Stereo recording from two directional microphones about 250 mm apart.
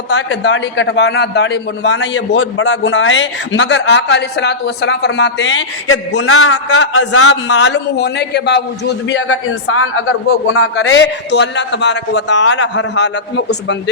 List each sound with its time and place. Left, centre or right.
0.1 s a man's voice: left